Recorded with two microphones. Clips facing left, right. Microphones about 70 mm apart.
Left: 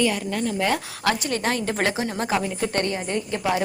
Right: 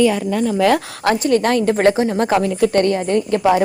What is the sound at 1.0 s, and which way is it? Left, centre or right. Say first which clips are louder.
Speech: right 8 dB; right.